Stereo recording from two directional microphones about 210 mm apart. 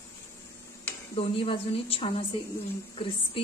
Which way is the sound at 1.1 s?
25° left (ahead or behind).